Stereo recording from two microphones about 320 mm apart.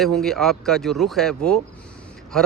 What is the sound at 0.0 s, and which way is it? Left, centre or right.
Speech, centre.